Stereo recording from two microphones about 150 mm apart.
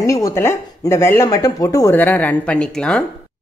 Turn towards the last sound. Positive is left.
turn(degrees=5)  # may be behind; listen again after turning